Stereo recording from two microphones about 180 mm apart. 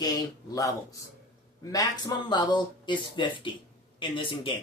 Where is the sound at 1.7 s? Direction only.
20° left (ahead or behind).